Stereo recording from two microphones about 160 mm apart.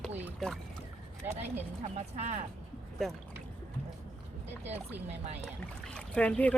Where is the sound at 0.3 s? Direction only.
Centre (ahead or behind).